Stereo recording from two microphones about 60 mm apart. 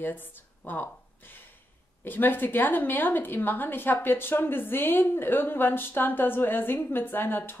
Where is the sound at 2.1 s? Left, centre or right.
Left.